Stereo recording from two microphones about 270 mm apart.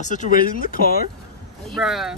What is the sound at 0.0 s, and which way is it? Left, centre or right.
Speech, left.